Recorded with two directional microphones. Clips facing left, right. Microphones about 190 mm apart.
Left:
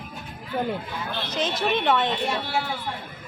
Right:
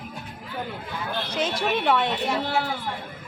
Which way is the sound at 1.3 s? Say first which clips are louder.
Left 1 dB; 10° right (ahead or behind).